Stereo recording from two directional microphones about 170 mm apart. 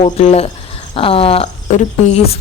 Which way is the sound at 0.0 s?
40° left (ahead or behind).